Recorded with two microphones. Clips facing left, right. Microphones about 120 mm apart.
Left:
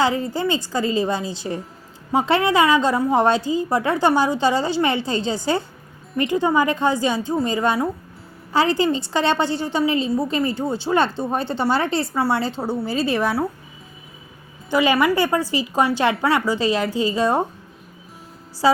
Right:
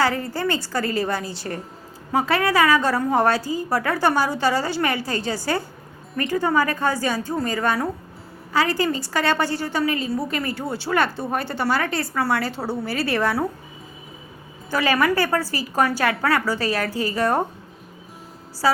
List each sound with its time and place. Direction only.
0.0 s a woman's voice: 20° left (ahead or behind)
14.7 s a woman's voice: 15° left (ahead or behind)
18.6 s a woman's voice: 25° left (ahead or behind)